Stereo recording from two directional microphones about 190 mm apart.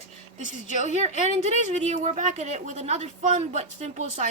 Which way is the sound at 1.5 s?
40° right (ahead or behind).